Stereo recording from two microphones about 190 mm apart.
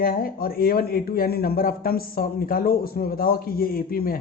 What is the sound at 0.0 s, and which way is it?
Speech, 50° left (ahead or behind).